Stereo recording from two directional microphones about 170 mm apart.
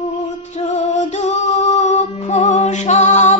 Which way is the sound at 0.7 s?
40° left (ahead or behind).